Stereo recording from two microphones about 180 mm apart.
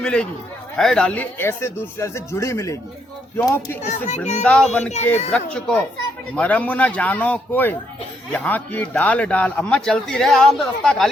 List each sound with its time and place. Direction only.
0.0 s a man's voice: 5° left (ahead or behind)
3.8 s a child's voice: 40° left (ahead or behind)
4.4 s a man's voice: 5° left (ahead or behind)